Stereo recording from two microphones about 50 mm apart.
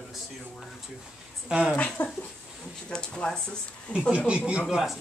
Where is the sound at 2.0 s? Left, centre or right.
Left.